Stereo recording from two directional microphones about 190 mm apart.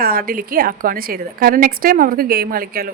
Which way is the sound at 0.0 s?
50° right (ahead or behind).